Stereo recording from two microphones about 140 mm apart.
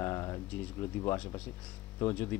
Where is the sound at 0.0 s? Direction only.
25° left (ahead or behind).